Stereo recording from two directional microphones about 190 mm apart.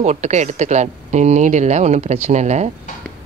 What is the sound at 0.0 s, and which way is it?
Speech, 35° right (ahead or behind).